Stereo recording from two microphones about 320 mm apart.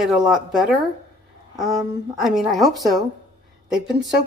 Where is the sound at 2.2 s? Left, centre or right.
Centre.